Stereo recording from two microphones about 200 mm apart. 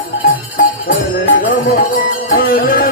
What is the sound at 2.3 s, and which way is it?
Music, 45° left (ahead or behind).